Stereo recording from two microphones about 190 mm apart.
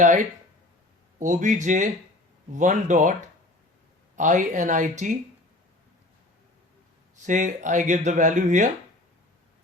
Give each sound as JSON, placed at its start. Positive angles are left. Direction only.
{"t": 0.0, "sound": "speech", "side_deg": -40}
{"t": 7.2, "sound": "speech", "side_deg": -40}